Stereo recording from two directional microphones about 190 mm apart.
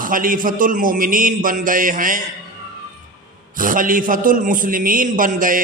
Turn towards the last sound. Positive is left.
turn(degrees=-45)  # may be behind; listen again after turning